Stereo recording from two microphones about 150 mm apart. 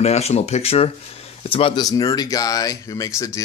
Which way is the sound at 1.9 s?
25° left (ahead or behind).